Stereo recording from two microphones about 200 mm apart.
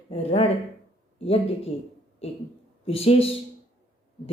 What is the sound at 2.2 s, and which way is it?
A woman's voice, 30° left (ahead or behind).